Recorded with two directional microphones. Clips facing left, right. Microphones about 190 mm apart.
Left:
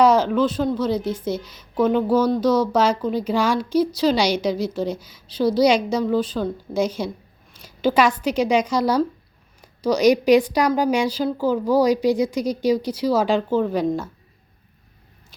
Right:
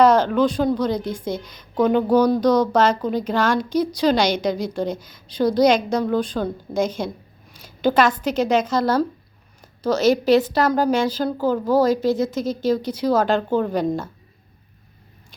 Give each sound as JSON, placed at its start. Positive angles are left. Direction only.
{"t": 0.0, "sound": "a woman's voice", "side_deg": 10}